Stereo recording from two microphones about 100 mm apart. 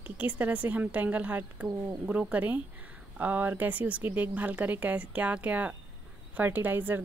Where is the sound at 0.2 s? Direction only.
15° right (ahead or behind).